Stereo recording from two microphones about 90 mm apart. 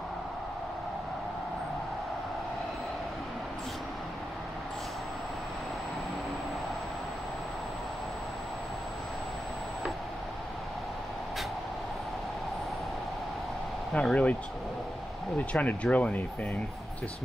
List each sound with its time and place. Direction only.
13.9 s speech: 15° left (ahead or behind)
15.3 s speech: 15° left (ahead or behind)